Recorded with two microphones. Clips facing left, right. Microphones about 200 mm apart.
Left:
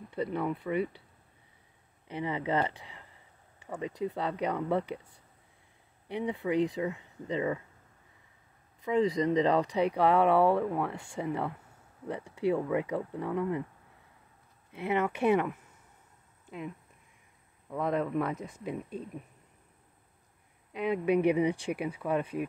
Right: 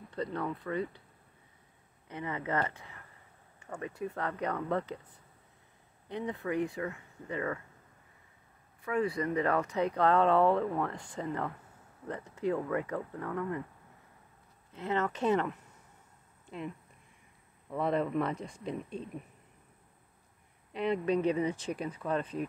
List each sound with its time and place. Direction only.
0.1 s speech: 10° left (ahead or behind)
2.2 s speech: 15° left (ahead or behind)
6.0 s speech: 10° left (ahead or behind)
8.8 s speech: 20° left (ahead or behind)
14.7 s speech: 10° left (ahead or behind)
20.7 s speech: 5° left (ahead or behind)